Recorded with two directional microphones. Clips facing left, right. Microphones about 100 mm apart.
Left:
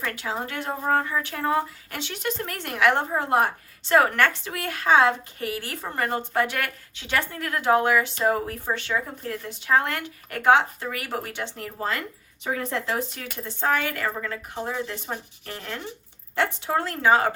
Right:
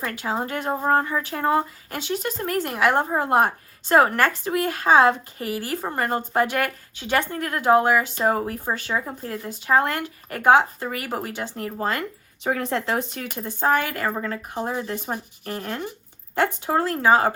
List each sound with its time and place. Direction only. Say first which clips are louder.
0.0 s a woman's voice: right 3 dB; 35° right (ahead or behind)
12.5 s speech: right 3 dB; 55° right (ahead or behind)
13.4 s a woman's voice: right 3 dB; 40° right (ahead or behind)